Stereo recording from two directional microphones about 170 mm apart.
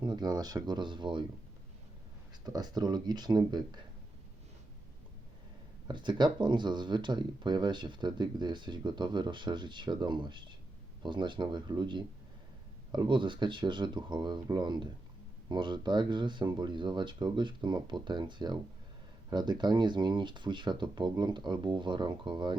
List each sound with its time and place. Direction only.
0.0 s speech: 25° right (ahead or behind)
2.5 s speech: 25° right (ahead or behind)
5.9 s speech: 25° right (ahead or behind)